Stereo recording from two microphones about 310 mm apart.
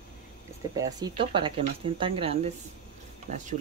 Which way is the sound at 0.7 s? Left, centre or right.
Centre.